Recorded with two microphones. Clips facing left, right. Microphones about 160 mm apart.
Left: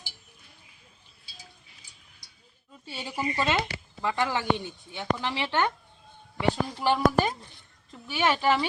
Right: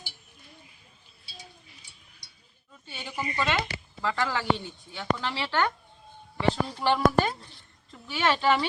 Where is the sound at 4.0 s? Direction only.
20° left (ahead or behind).